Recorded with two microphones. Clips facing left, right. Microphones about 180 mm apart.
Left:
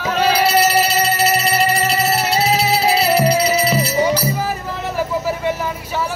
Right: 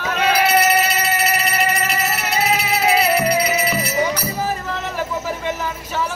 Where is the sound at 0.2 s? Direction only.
30° left (ahead or behind).